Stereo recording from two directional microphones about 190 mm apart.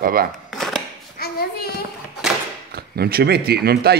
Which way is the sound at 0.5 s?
Centre (ahead or behind).